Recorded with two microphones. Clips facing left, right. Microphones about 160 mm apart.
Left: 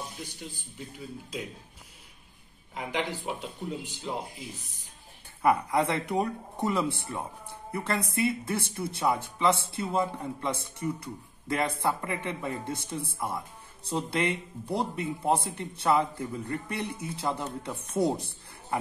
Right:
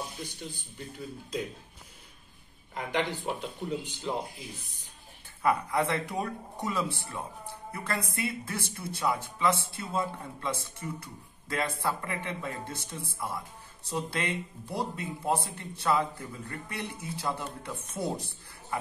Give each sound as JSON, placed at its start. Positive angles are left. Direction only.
{"t": 0.4, "sound": "speech", "side_deg": 5}
{"t": 2.7, "sound": "speech", "side_deg": 5}
{"t": 5.4, "sound": "speech", "side_deg": 20}